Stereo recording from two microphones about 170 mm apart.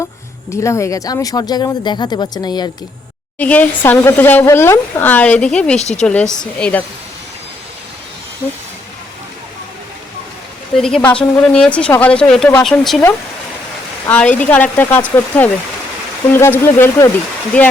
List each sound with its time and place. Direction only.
0.5 s speech: 15° left (ahead or behind)
3.3 s a woman's voice: 10° left (ahead or behind)
10.8 s a woman's voice: 5° left (ahead or behind)
14.1 s speech: 10° left (ahead or behind)